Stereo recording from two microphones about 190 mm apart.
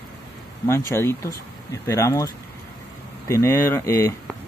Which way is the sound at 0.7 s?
15° left (ahead or behind).